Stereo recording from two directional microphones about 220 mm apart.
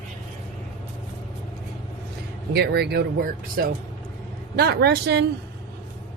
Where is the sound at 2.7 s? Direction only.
45° right (ahead or behind).